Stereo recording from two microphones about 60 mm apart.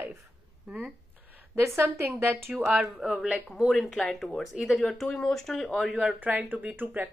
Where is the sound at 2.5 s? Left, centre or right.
Centre.